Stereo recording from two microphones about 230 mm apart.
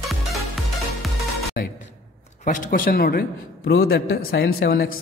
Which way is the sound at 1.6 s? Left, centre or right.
Left.